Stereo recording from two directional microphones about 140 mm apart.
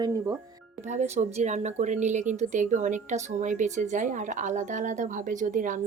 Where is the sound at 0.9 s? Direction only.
55° right (ahead or behind).